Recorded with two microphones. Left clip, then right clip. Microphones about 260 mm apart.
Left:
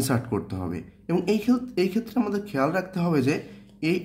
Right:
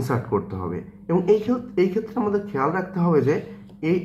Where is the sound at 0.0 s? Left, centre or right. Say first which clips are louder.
Right 3 dB; left.